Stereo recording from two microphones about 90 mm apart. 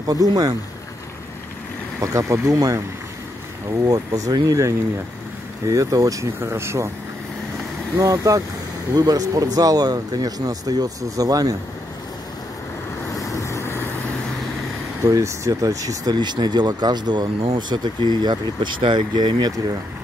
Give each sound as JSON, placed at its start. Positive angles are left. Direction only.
{"t": 0.0, "sound": "speech", "side_deg": -45}
{"t": 2.0, "sound": "speech", "side_deg": -35}
{"t": 3.8, "sound": "speech", "side_deg": -45}
{"t": 8.0, "sound": "speech", "side_deg": -40}
{"t": 13.1, "sound": "vehicle", "side_deg": 35}
{"t": 15.0, "sound": "speech", "side_deg": -35}